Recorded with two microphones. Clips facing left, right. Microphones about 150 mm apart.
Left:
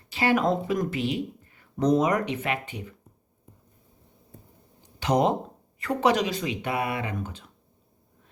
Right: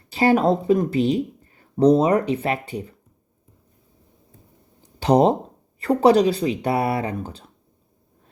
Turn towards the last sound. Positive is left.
turn(degrees=-35)  # may be behind; listen again after turning